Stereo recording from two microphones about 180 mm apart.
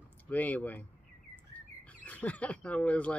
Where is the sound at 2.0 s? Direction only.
10° left (ahead or behind).